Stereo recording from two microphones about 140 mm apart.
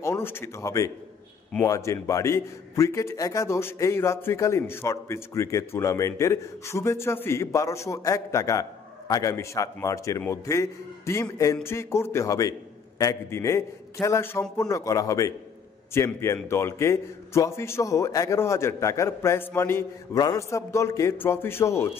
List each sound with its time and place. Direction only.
0.0 s a man's voice: 20° left (ahead or behind)